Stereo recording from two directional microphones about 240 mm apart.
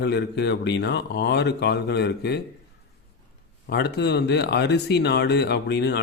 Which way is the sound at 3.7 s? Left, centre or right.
Left.